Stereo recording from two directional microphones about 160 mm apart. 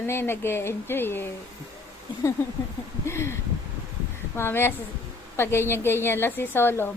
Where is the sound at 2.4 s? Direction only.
15° left (ahead or behind).